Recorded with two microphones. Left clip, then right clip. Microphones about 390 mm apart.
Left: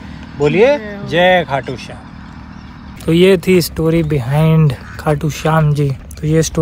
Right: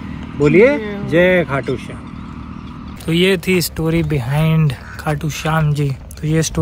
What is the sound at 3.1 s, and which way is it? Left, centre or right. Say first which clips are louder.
Speech: left 5 dB; centre.